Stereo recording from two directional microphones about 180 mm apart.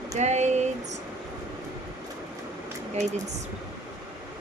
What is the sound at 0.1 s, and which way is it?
Speech, 40° right (ahead or behind).